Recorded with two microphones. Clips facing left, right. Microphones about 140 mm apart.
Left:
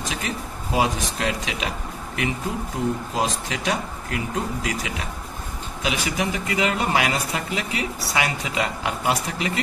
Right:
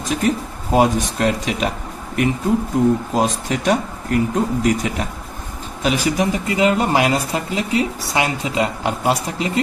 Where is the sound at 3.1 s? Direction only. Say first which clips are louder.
Right 6 dB; 45° right (ahead or behind).